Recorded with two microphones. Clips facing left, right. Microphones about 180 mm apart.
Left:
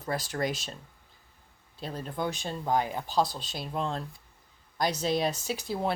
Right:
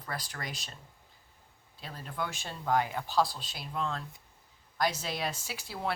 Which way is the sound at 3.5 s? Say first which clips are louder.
Left 3 dB; 30° left (ahead or behind).